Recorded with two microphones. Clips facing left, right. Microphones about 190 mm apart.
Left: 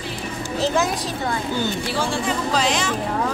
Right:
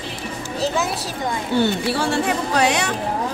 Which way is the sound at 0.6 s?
Centre (ahead or behind).